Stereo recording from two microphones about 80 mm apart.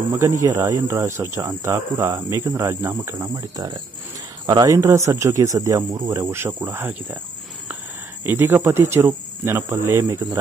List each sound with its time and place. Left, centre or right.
0.2 s a man's voice: right
4.5 s speech: right
4.7 s a man's voice: right
6.6 s speech: right
8.2 s a man's voice: right